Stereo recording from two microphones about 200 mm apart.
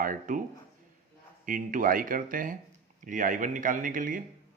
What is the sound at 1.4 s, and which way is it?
Speech, 40° right (ahead or behind).